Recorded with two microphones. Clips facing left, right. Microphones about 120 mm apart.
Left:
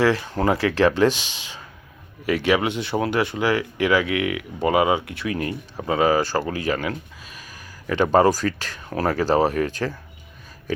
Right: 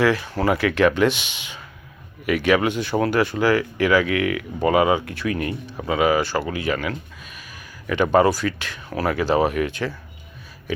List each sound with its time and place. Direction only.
0.0 s speech: 30° left (ahead or behind)